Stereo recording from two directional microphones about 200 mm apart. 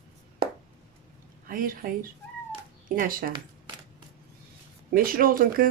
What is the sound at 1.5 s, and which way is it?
Speech, 45° right (ahead or behind).